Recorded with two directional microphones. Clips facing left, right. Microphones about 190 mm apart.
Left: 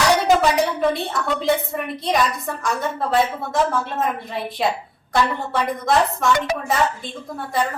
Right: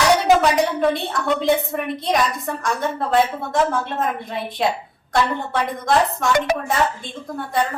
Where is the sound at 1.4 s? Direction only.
Centre (ahead or behind).